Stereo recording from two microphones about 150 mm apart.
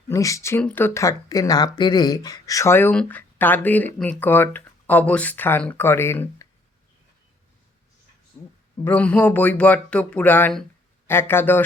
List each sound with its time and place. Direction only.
0.1 s speech: 20° left (ahead or behind)
8.8 s speech: 10° left (ahead or behind)